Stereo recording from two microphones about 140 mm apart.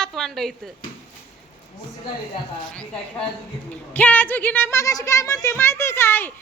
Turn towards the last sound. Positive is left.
turn(degrees=15)  # may be behind; listen again after turning